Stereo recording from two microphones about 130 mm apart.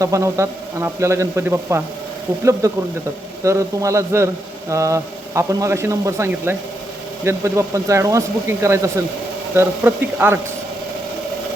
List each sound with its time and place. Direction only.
0.0 s a man's voice: 25° right (ahead or behind)